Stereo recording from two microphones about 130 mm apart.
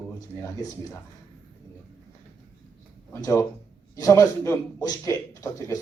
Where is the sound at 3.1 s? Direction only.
20° left (ahead or behind).